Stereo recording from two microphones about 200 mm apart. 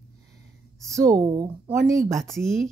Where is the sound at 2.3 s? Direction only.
Centre (ahead or behind).